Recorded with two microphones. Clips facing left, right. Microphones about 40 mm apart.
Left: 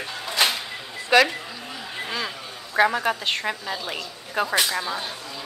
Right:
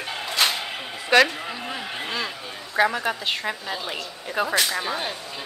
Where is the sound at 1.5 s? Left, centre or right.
Right.